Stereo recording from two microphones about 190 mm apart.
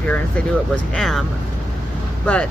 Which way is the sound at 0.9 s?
Centre (ahead or behind).